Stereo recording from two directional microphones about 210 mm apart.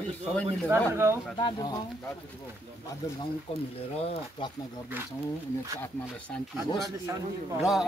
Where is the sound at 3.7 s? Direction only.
25° left (ahead or behind).